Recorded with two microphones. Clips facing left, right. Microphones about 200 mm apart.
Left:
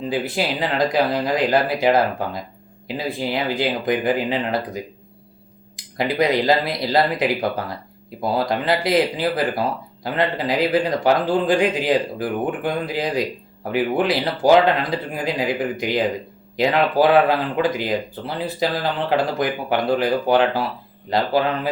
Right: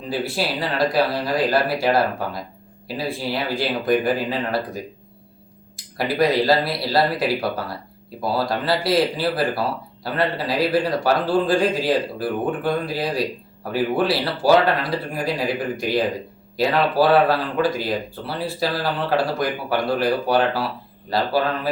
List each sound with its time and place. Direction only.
0.1 s speech: 20° left (ahead or behind)